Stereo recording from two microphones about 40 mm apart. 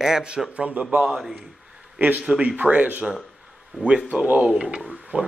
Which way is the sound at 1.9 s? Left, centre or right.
Right.